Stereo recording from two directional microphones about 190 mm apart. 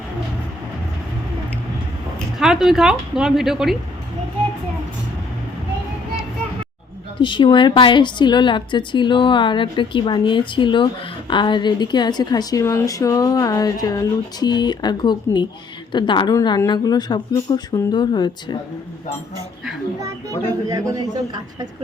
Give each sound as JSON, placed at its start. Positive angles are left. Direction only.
{"t": 2.1, "sound": "speech", "side_deg": -5}
{"t": 7.2, "sound": "a woman's voice", "side_deg": 25}
{"t": 20.7, "sound": "speech", "side_deg": -20}